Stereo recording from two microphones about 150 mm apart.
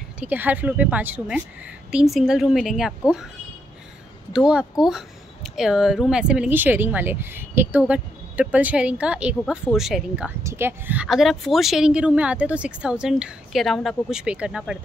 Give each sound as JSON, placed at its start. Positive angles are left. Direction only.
{"t": 0.2, "sound": "speech", "side_deg": -10}
{"t": 4.3, "sound": "speech", "side_deg": -5}
{"t": 10.4, "sound": "speech", "side_deg": -15}
{"t": 11.1, "sound": "speech", "side_deg": 0}